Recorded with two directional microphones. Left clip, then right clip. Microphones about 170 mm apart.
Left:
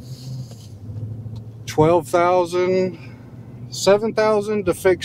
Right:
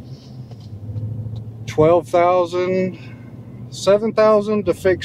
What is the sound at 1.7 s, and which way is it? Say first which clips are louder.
Speech: right 2 dB; 15° left (ahead or behind).